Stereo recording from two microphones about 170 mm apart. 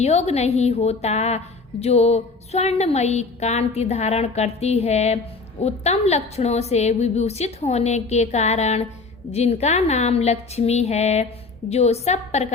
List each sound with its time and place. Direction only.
0.0 s a woman's voice: 40° left (ahead or behind)